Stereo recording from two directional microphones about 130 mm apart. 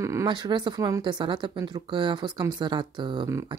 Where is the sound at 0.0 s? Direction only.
25° right (ahead or behind).